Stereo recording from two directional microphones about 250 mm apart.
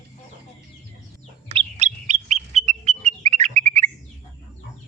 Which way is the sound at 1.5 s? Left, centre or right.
Right.